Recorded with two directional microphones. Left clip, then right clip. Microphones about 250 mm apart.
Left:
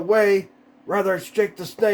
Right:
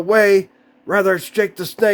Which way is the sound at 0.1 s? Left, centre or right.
Right.